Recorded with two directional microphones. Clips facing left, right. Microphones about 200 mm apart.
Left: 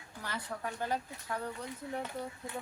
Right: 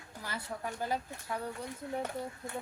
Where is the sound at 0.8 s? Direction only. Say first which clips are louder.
Even; 10° right (ahead or behind).